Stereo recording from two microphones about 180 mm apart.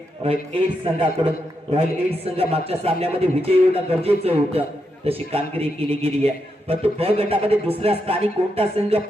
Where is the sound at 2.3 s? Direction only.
35° right (ahead or behind).